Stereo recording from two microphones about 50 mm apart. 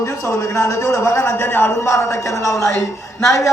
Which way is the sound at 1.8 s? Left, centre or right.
Left.